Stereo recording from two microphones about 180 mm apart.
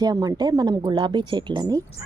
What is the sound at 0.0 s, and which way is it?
A woman's voice, 20° right (ahead or behind).